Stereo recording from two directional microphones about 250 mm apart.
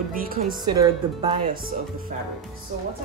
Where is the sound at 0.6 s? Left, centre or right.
Centre.